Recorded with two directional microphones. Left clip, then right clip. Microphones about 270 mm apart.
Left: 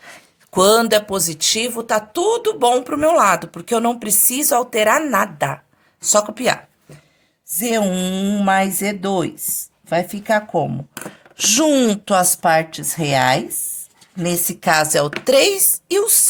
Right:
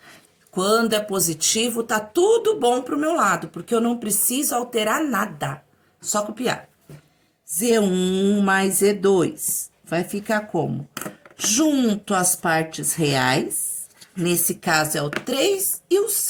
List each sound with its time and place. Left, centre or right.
0.0 s speech: left
7.6 s speech: left